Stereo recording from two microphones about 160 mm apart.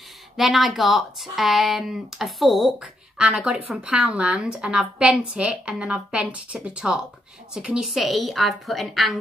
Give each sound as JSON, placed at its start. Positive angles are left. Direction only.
{"t": 0.4, "sound": "speech", "side_deg": 0}